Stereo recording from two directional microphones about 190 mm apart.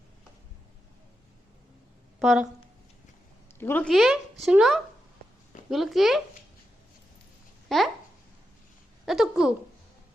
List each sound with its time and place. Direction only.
2.1 s a woman's voice: 5° right (ahead or behind)
3.6 s speech: 10° left (ahead or behind)
7.7 s speech: centre (ahead or behind)
9.0 s speech: centre (ahead or behind)